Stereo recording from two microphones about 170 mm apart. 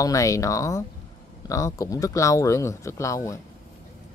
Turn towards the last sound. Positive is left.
turn(degrees=20)  # may be behind; listen again after turning